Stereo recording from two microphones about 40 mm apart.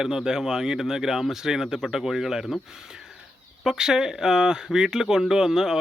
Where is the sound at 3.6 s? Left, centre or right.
Centre.